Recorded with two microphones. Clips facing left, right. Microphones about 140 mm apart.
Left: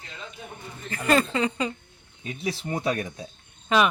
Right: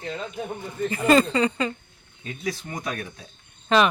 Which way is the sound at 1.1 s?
5° left (ahead or behind).